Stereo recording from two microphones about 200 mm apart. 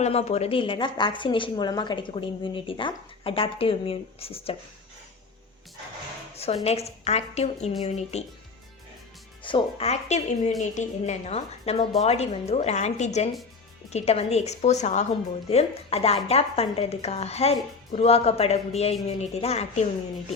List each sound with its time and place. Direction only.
0.0 s a woman's voice: 30° left (ahead or behind)
6.3 s a sound: 30° left (ahead or behind)
6.7 s speech: 30° left (ahead or behind)
9.4 s speech: 25° left (ahead or behind)